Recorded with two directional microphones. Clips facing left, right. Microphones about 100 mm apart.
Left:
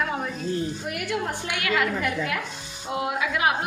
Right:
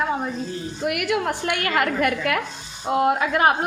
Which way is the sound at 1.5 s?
45° right (ahead or behind).